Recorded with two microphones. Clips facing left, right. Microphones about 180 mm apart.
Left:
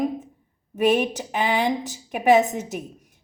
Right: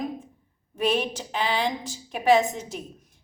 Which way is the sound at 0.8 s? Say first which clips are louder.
Left 5 dB; 20° left (ahead or behind).